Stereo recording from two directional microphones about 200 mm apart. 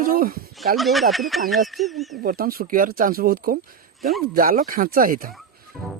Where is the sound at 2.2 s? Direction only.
45° right (ahead or behind).